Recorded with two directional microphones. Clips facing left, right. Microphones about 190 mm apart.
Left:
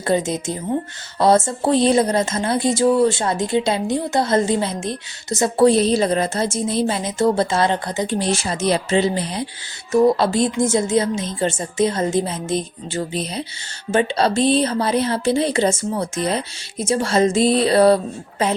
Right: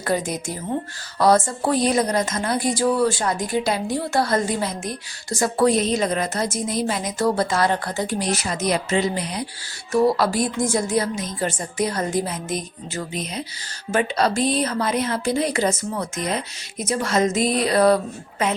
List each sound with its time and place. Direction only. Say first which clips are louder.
0.0 s speech: left 4 dB; 25° left (ahead or behind)